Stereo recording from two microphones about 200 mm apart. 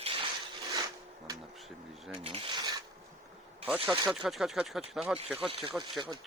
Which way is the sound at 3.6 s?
5° right (ahead or behind).